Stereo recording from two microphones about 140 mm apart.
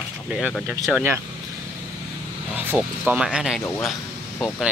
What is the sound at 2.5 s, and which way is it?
Vehicle, 15° right (ahead or behind).